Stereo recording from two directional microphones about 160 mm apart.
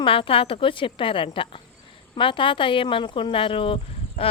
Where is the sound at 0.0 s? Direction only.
35° left (ahead or behind).